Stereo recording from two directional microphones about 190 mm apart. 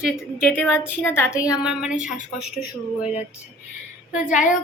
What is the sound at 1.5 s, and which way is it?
Speech, 5° right (ahead or behind).